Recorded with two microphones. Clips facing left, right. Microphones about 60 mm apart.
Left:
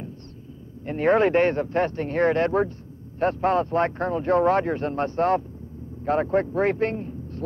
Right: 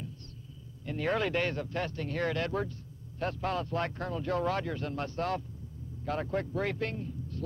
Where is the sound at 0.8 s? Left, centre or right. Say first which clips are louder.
Left 11 dB; left.